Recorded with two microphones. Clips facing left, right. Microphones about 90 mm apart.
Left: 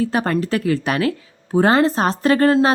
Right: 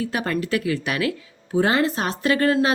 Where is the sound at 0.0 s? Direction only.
35° left (ahead or behind).